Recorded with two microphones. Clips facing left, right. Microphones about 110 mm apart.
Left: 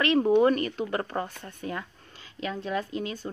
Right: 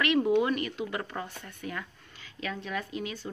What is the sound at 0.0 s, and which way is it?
Speech, 35° left (ahead or behind).